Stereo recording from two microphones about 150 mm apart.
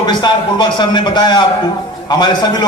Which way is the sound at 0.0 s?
30° left (ahead or behind).